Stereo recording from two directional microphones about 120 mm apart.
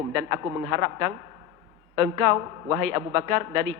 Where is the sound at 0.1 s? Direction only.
25° right (ahead or behind).